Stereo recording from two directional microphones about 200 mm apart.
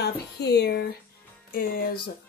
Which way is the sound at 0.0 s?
55° left (ahead or behind).